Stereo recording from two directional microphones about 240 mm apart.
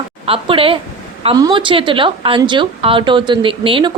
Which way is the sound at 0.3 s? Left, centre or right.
Right.